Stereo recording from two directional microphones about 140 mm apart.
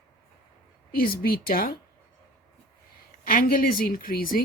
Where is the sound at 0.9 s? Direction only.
90° left.